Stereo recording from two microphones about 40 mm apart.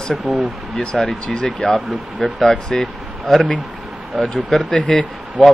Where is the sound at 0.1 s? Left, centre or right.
Centre.